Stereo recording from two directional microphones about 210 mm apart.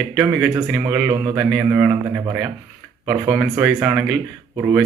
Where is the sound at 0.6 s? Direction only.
20° right (ahead or behind); by 4.1 s 5° right (ahead or behind).